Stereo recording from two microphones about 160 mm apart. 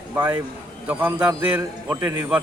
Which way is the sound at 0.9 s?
10° right (ahead or behind).